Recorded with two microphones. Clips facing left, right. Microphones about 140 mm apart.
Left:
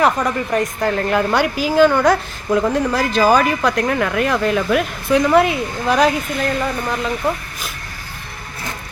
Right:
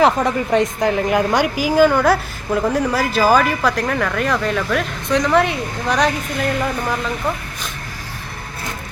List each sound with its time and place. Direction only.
0.0 s speech: 25° right (ahead or behind)
0.9 s a woman's voice: 10° right (ahead or behind)